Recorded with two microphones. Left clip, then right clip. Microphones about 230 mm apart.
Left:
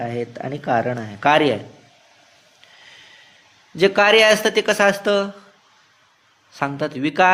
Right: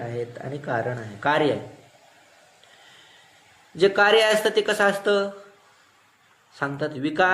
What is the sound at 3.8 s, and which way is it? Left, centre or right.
Speech, left.